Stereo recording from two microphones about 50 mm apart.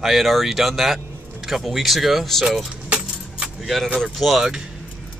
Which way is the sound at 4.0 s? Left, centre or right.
Centre.